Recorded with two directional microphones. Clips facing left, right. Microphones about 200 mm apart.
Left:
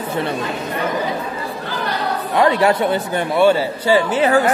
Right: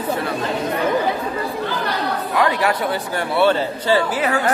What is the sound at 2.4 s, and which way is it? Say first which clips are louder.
Speech: left 5 dB; 25° left (ahead or behind).